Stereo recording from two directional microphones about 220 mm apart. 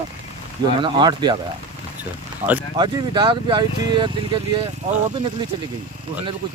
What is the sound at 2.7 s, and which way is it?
Speech, 20° right (ahead or behind).